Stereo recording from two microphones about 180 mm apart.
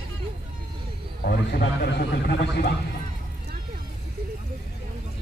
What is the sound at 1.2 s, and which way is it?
Speech, 60° left (ahead or behind).